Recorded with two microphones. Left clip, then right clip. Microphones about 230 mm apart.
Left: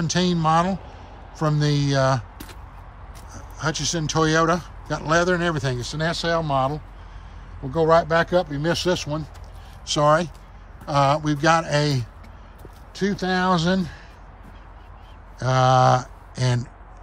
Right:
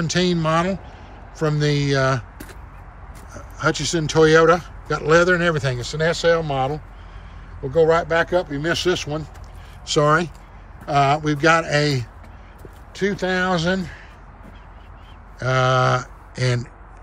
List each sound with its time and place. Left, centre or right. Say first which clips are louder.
0.0 s a man's voice: right 1 dB; centre
3.3 s speech: right 5 dB; centre
9.8 s speech: right 1 dB; centre
15.3 s a sound: even; centre